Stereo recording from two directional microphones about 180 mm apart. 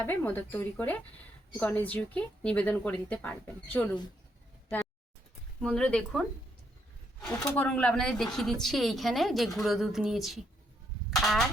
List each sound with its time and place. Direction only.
0.0 s a woman's voice: 10° left (ahead or behind)
5.6 s speech: 5° left (ahead or behind)
11.1 s a sound: centre (ahead or behind)